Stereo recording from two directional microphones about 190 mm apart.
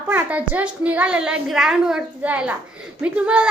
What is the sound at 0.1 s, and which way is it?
A woman's voice, 10° right (ahead or behind).